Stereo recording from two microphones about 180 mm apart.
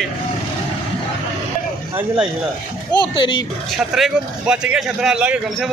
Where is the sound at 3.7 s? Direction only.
Centre (ahead or behind).